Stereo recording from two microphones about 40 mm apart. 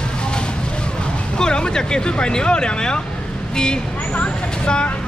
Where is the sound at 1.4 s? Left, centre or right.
Centre.